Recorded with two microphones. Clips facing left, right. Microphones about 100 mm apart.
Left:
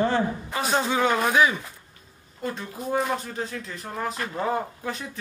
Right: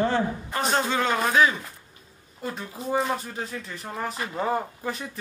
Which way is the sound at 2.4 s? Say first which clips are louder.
Left 2 dB; centre (ahead or behind).